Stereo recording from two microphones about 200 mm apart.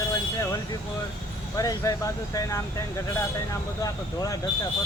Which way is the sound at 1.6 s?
15° left (ahead or behind).